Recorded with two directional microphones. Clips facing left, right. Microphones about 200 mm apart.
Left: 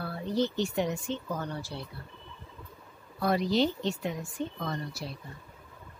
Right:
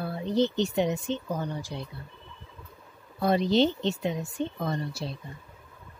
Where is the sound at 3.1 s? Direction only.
25° right (ahead or behind).